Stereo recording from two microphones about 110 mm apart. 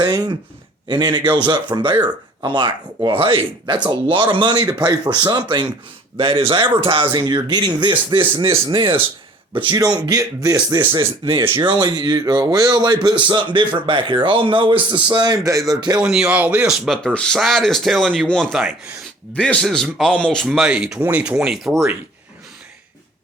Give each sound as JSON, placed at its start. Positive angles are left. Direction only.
{"t": 0.0, "sound": "speech", "side_deg": -40}
{"t": 1.2, "sound": "speech", "side_deg": -15}
{"t": 1.5, "sound": "speech", "side_deg": -40}
{"t": 9.7, "sound": "speech", "side_deg": -35}
{"t": 11.3, "sound": "speech", "side_deg": -45}
{"t": 16.0, "sound": "speech", "side_deg": -5}